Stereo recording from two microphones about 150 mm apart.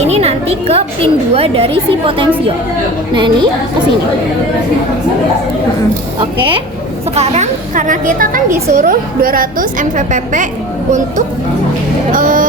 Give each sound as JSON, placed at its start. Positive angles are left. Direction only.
{"t": 0.0, "sound": "music", "side_deg": -45}
{"t": 1.3, "sound": "a woman's voice", "side_deg": -40}
{"t": 6.1, "sound": "a woman's voice", "side_deg": -30}
{"t": 7.2, "sound": "a woman's voice", "side_deg": -55}
{"t": 8.4, "sound": "a woman's voice", "side_deg": -20}
{"t": 8.7, "sound": "a woman's voice", "side_deg": -65}
{"t": 12.1, "sound": "a woman's voice", "side_deg": -60}